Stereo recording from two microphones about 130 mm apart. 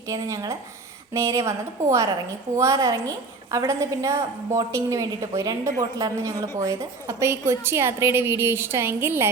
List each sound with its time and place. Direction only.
0.1 s a woman's voice: 25° right (ahead or behind)